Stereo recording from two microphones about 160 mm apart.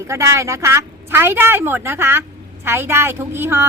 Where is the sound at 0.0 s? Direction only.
20° right (ahead or behind).